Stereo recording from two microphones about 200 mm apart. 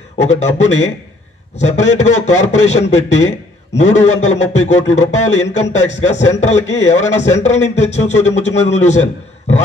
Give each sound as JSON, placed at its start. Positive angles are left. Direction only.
{"t": 0.2, "sound": "a man's voice", "side_deg": 35}